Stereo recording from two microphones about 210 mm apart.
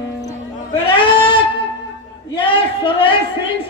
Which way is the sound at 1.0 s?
25° left (ahead or behind).